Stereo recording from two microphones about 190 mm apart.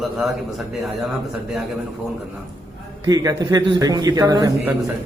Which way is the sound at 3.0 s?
20° right (ahead or behind).